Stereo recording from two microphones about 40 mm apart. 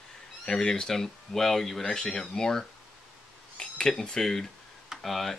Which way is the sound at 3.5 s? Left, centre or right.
Left.